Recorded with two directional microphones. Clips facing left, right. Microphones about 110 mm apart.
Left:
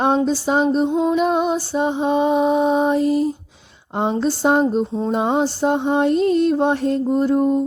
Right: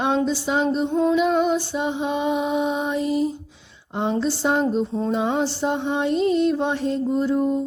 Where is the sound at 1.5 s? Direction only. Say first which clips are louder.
Left 3 dB; 35° left (ahead or behind); by 7.6 s 50° left (ahead or behind).